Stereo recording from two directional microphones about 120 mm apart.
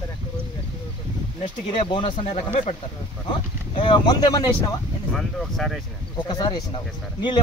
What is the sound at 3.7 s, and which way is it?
Speech, 40° left (ahead or behind).